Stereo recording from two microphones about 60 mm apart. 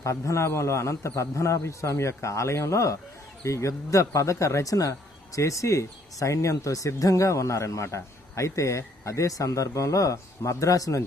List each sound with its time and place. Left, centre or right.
0.0 s speech: left